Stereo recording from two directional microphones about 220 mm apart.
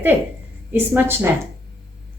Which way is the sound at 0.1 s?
10° right (ahead or behind).